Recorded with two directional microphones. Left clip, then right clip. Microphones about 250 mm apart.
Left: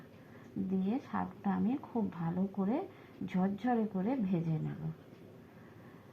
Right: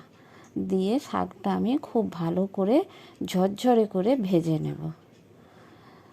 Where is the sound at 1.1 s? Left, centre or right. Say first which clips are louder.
Right 9 dB; right.